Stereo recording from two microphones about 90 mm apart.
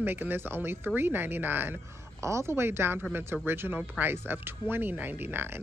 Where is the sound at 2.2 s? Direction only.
35° right (ahead or behind).